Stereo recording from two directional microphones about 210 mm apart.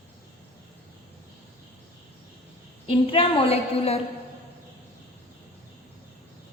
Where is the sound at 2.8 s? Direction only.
25° left (ahead or behind).